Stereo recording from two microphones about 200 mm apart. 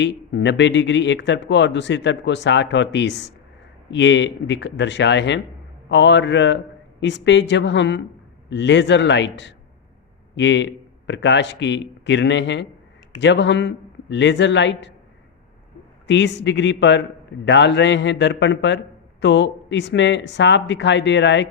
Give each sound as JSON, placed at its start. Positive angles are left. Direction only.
{"t": 0.0, "sound": "speech", "side_deg": 65}
{"t": 16.0, "sound": "speech", "side_deg": 60}